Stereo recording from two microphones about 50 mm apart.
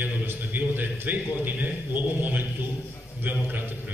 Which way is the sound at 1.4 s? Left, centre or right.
Right.